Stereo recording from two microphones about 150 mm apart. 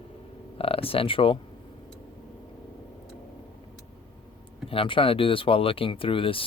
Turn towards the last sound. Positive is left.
turn(degrees=35)  # may be behind; listen again after turning